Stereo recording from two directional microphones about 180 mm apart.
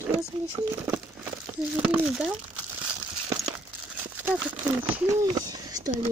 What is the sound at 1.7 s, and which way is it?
Speech, 5° right (ahead or behind).